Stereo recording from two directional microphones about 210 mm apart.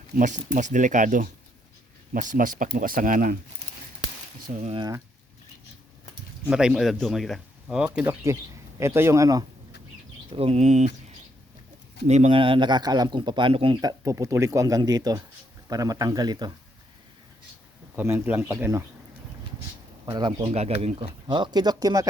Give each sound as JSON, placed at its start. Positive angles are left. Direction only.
{"t": 0.2, "sound": "speech", "side_deg": -35}
{"t": 4.5, "sound": "speech", "side_deg": -30}
{"t": 6.5, "sound": "speech", "side_deg": -5}
{"t": 10.2, "sound": "speech", "side_deg": -25}
{"t": 12.0, "sound": "speech", "side_deg": -30}
{"t": 17.9, "sound": "speech", "side_deg": -10}
{"t": 20.1, "sound": "speech", "side_deg": -20}
{"t": 20.4, "sound": "speech", "side_deg": -30}